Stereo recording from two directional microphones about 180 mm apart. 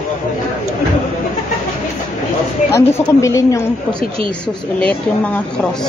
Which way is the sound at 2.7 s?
15° left (ahead or behind).